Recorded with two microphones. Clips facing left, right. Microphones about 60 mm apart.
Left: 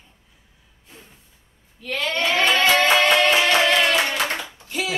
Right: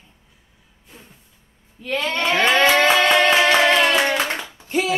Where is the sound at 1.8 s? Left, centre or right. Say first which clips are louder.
Right 1 dB; right.